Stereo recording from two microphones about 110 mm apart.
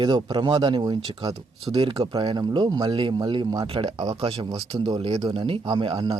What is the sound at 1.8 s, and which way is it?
Speech, 55° right (ahead or behind).